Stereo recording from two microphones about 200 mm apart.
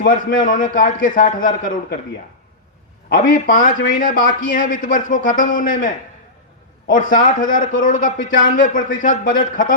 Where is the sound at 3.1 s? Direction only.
40° left (ahead or behind).